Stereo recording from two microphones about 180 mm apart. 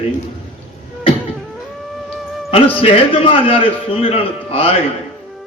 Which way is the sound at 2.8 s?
30° left (ahead or behind).